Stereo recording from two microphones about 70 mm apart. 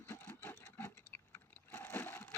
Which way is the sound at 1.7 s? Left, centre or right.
Left.